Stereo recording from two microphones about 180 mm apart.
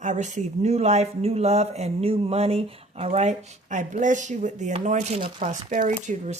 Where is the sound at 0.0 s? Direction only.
40° right (ahead or behind).